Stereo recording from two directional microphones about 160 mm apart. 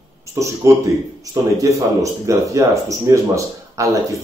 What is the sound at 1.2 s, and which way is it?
Speech, 20° right (ahead or behind).